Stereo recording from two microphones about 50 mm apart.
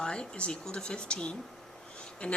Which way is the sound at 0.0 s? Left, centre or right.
Centre.